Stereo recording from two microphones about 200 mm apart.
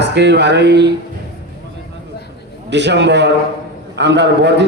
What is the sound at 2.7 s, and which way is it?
A man's voice, 60° right (ahead or behind).